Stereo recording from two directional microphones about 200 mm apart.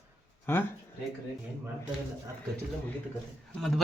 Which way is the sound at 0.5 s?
10° left (ahead or behind).